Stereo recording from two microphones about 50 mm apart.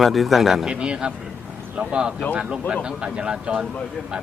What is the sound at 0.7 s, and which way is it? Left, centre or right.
Speech, centre.